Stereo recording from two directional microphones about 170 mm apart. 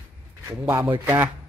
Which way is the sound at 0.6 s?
15° right (ahead or behind).